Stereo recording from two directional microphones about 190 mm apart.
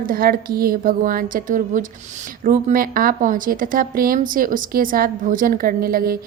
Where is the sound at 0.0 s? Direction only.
50° right (ahead or behind).